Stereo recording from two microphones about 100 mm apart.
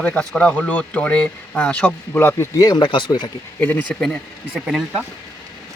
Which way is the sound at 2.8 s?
55° left (ahead or behind).